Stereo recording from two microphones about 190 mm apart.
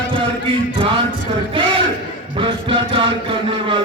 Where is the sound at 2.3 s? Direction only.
25° right (ahead or behind).